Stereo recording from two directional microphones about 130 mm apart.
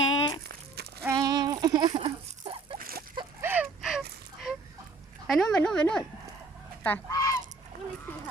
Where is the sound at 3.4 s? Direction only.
15° right (ahead or behind).